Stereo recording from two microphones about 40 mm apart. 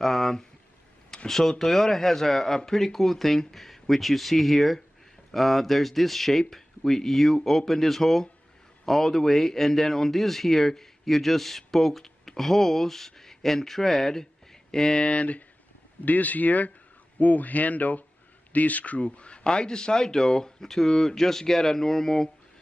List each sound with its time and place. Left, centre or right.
0.0 s speech: centre
15.0 s speech: left; by 22.3 s centre